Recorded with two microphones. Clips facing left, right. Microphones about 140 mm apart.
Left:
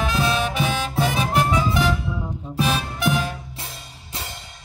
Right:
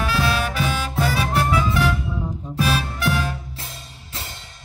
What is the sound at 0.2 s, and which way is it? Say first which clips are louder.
Music: even; 15° left (ahead or behind).